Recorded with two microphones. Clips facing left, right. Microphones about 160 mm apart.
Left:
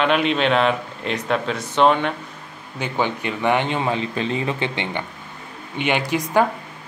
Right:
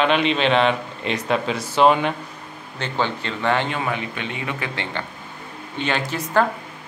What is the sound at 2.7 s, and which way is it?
Speech, 10° left (ahead or behind).